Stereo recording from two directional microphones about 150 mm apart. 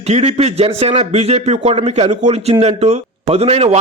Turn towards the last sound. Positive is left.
turn(degrees=-45)  # may be behind; listen again after turning